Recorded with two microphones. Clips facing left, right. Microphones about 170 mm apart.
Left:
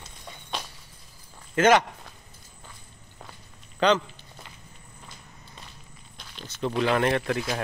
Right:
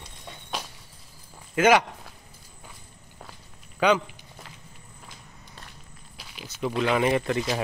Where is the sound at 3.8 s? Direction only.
10° right (ahead or behind).